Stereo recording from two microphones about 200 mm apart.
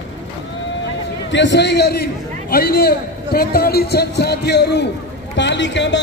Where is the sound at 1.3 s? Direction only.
60° left (ahead or behind).